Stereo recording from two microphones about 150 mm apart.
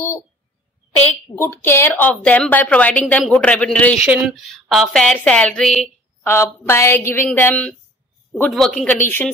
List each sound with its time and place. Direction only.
1.0 s a woman's voice: 10° left (ahead or behind)
6.2 s a woman's voice: 15° left (ahead or behind)
9.0 s a woman's voice: 15° left (ahead or behind)